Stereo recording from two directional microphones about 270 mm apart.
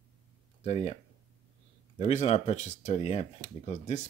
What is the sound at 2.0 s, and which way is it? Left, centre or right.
Speech, left.